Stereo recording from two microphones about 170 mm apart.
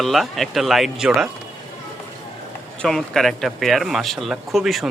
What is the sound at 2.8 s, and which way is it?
Speech, centre (ahead or behind).